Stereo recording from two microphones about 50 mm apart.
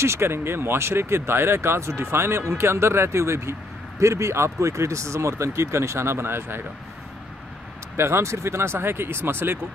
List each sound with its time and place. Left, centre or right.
0.0 s speech: right
7.9 s speech: right